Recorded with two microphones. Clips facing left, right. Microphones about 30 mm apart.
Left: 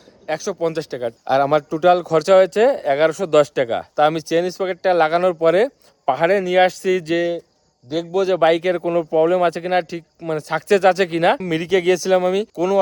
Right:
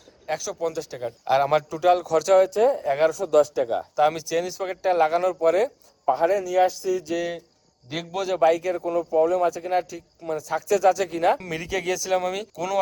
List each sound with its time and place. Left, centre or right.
0.3 s speech: centre
0.6 s speech: left
1.2 s speech: centre
1.9 s speech: left
2.5 s speech: left
2.8 s speech: left
3.1 s speech: left
3.9 s speech: left
6.1 s speech: left
6.3 s speech: left
6.7 s speech: left
7.9 s a man's voice: centre
8.4 s speech: left
11.3 s speech: left